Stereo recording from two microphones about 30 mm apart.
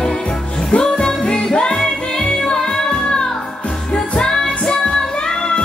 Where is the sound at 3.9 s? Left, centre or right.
Left.